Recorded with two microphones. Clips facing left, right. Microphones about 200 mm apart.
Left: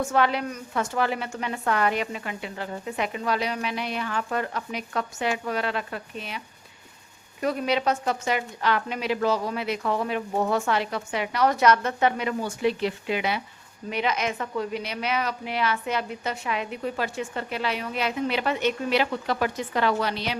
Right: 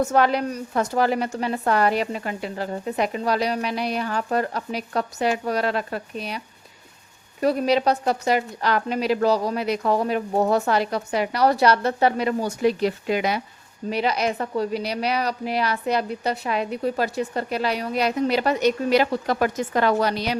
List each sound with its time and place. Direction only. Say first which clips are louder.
0.0 s a woman's voice: right 4 dB; 40° right (ahead or behind)
7.4 s a woman's voice: right 5 dB; 35° right (ahead or behind)